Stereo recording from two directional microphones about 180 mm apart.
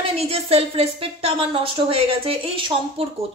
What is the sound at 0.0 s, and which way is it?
A woman's voice, 35° right (ahead or behind).